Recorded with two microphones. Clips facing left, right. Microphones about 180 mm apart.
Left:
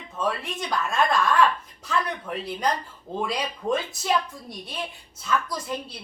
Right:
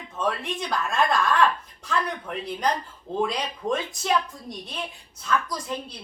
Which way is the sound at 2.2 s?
5° left (ahead or behind).